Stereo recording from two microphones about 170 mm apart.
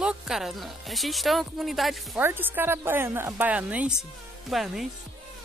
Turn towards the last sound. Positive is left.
turn(degrees=0)  # may be behind; listen again after turning